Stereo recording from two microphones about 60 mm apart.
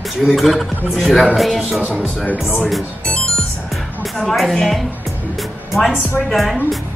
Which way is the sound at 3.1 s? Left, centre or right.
Centre.